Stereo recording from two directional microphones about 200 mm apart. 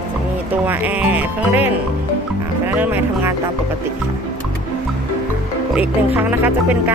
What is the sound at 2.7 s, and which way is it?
Speech, 10° right (ahead or behind).